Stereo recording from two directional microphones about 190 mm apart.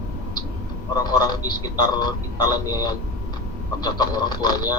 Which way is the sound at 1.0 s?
20° left (ahead or behind).